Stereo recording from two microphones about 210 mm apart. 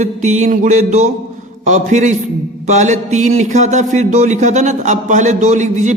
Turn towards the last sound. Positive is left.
turn(degrees=-35)  # may be behind; listen again after turning